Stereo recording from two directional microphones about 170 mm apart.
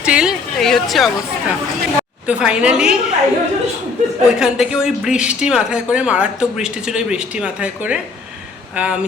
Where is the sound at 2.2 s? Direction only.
5° right (ahead or behind).